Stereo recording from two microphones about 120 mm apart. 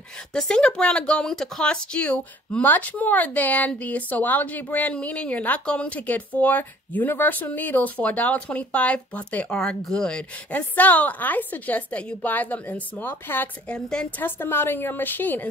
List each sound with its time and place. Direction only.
0.3 s speech: 10° left (ahead or behind)
13.7 s speech: 5° left (ahead or behind)
14.2 s speech: 15° left (ahead or behind)